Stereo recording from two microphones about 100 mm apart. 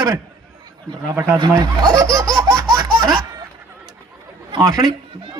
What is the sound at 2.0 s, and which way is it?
Laughter, 30° right (ahead or behind).